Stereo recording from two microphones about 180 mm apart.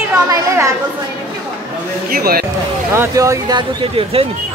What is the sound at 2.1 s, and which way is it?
Speech, 55° right (ahead or behind).